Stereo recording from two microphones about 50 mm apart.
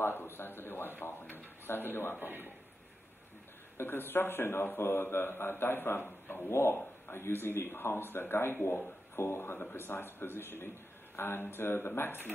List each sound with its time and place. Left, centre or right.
0.0 s a man's voice: left
2.1 s a man's voice: right
3.7 s a man's voice: left
6.5 s a man's voice: left